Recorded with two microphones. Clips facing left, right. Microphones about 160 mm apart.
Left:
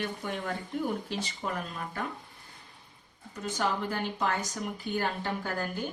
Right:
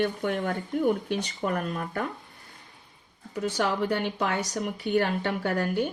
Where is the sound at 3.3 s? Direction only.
75° right (ahead or behind).